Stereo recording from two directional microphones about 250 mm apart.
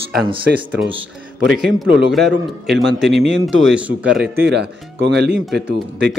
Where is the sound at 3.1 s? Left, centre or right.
Right.